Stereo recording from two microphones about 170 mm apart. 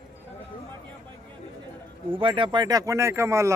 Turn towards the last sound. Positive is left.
turn(degrees=-15)  # may be behind; listen again after turning